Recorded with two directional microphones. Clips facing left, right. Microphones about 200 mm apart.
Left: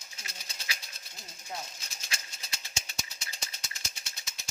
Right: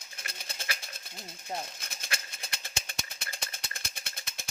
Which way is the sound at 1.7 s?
55° right (ahead or behind).